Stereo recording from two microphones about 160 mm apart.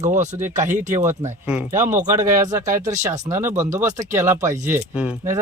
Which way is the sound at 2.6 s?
50° right (ahead or behind).